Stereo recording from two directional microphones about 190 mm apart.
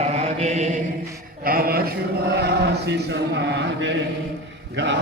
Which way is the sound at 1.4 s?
50° right (ahead or behind).